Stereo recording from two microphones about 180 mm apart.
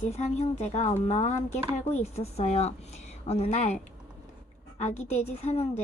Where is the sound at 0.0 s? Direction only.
40° left (ahead or behind).